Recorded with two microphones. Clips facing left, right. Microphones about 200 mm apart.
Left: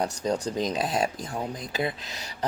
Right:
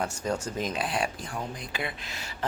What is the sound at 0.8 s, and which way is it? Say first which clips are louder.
Speech: left 3 dB; 40° left (ahead or behind).